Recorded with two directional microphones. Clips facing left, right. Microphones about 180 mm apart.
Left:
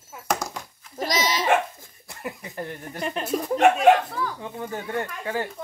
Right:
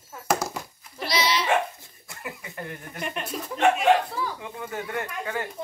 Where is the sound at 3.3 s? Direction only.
45° left (ahead or behind).